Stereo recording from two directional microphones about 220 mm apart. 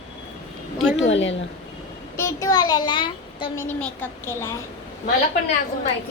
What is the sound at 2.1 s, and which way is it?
A child's voice, 15° left (ahead or behind).